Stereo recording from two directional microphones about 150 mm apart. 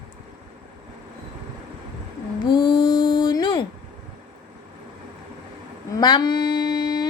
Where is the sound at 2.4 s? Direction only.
30° left (ahead or behind).